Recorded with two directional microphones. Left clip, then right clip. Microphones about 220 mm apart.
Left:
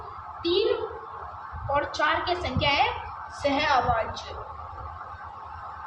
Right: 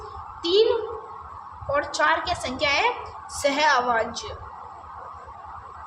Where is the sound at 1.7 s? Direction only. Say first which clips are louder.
Right 3 dB; 50° right (ahead or behind).